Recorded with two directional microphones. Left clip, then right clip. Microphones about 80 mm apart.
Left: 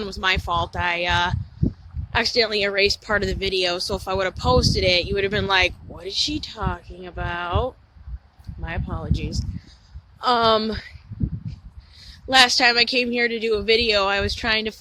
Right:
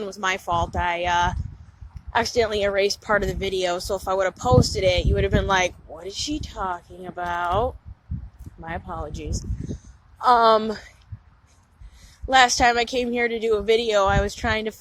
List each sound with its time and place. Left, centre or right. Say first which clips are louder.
0.1 s speech: left 2 dB; left
2.4 s speech: left 1 dB; left
10.2 s a woman's voice: right 2 dB; left
11.9 s speech: left 1 dB; left